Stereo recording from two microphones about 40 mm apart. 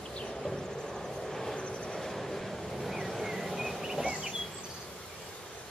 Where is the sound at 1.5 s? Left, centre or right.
Left.